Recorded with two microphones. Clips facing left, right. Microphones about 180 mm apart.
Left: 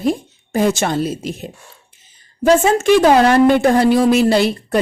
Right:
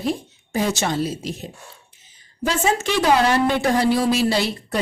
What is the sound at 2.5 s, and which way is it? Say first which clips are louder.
A woman's voice: left 10 dB; 50° left (ahead or behind).